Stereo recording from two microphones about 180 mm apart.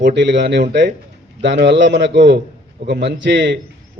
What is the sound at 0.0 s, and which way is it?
A man's voice, 80° right.